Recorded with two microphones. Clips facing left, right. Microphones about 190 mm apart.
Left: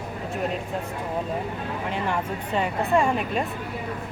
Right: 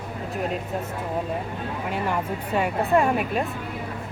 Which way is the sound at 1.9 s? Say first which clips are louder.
Right 1 dB; 5° right (ahead or behind).